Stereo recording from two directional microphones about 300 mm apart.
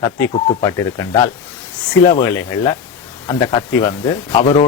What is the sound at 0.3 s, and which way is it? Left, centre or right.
Speech, centre.